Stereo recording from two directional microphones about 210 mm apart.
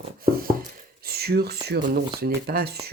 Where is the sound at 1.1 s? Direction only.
50° right (ahead or behind).